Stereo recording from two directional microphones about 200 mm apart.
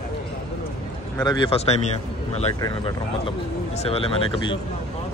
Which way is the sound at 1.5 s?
30° left (ahead or behind).